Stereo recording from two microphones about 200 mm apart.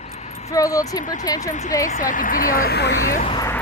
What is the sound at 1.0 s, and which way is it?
Speech, 40° left (ahead or behind).